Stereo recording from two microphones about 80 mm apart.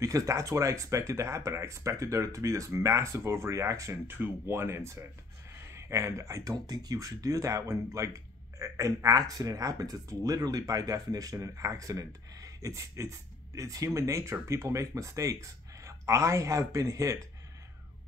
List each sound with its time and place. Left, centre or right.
0.0 s speech: right
4.1 s speech: right
6.7 s speech: right